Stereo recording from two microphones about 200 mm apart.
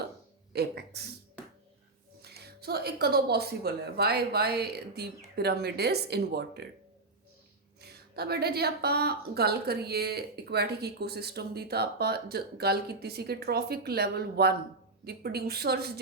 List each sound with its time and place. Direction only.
0.5 s a woman's voice: 55° right (ahead or behind)
2.2 s a woman's voice: 50° right (ahead or behind)
7.8 s a woman's voice: 55° right (ahead or behind)